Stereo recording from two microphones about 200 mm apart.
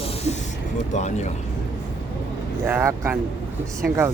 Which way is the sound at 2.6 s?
15° right (ahead or behind).